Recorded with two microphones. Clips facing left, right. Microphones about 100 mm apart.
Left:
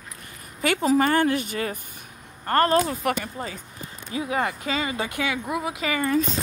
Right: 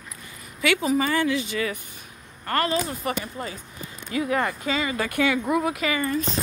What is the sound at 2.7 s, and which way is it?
Speech, 70° left (ahead or behind).